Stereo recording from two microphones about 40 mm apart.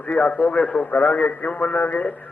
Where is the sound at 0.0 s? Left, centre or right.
Left.